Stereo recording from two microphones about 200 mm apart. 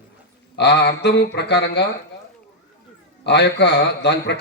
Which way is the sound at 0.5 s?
55° left (ahead or behind).